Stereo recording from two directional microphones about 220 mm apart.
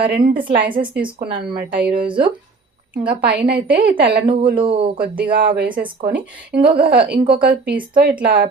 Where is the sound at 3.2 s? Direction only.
45° right (ahead or behind).